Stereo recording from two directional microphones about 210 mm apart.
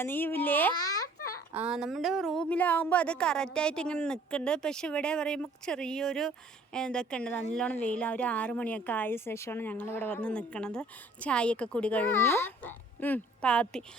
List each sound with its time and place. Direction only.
0.0 s a woman's voice: 10° left (ahead or behind)
1.5 s a woman's voice: 5° right (ahead or behind)